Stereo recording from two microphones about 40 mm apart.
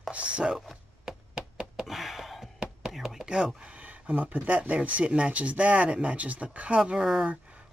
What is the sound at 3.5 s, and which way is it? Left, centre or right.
Speech, right.